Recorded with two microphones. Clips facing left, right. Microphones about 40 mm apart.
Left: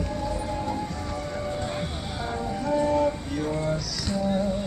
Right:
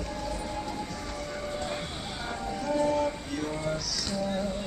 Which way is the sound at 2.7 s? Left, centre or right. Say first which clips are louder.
Left 4 dB; centre.